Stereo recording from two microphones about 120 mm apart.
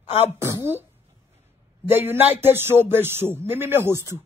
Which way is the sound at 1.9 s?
15° right (ahead or behind).